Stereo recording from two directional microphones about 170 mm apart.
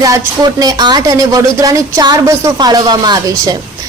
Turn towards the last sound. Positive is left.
turn(degrees=-20)  # may be behind; listen again after turning